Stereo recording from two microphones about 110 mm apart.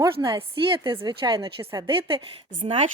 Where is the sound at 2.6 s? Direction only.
90° right.